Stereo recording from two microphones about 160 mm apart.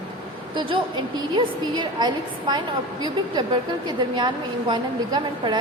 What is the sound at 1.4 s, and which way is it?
A woman's voice, 30° right (ahead or behind).